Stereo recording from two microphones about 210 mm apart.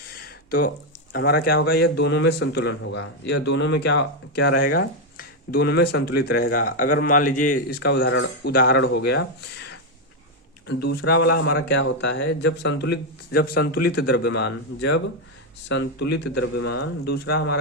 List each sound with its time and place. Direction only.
0.1 s a sound: 50° left (ahead or behind)
1.1 s speech: 45° left (ahead or behind); by 8.5 s 65° left (ahead or behind)
8.5 s a man's voice: 55° left (ahead or behind)
11.3 s a man's voice: 75° left (ahead or behind); by 17.5 s 50° left (ahead or behind)